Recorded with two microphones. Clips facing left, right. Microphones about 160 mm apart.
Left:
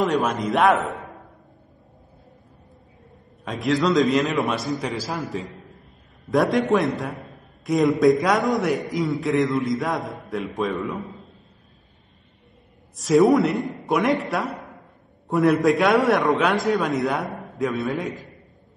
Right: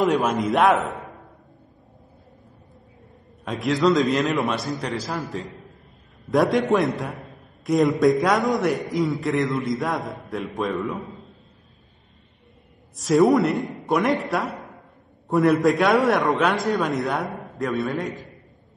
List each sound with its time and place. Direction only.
0.0 s a man's voice: centre (ahead or behind)
3.4 s a man's voice: centre (ahead or behind)
12.9 s a man's voice: centre (ahead or behind)